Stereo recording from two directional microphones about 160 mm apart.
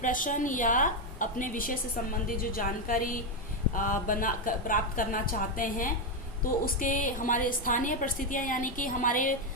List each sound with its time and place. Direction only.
0.0 s a woman's voice: 55° left (ahead or behind)